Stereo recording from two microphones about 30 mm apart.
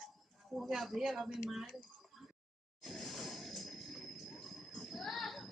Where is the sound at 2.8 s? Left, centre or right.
Centre.